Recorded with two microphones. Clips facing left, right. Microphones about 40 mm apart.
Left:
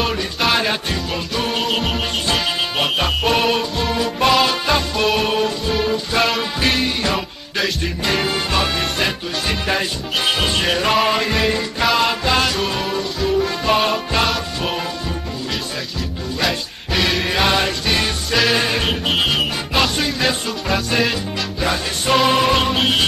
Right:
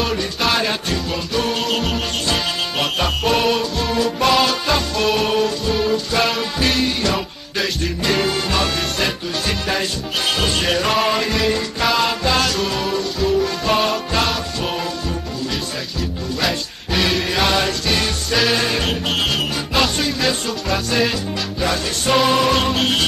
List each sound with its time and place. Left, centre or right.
0.0 s music: centre
16.3 s music: centre
17.3 s music: centre
18.3 s music: centre
18.6 s music: centre